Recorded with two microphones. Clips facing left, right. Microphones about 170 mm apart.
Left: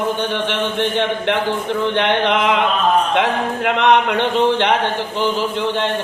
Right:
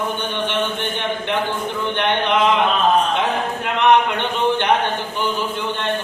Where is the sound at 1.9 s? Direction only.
90° left.